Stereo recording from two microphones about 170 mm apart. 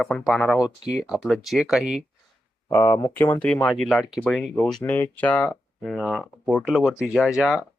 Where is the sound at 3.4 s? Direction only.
5° left (ahead or behind).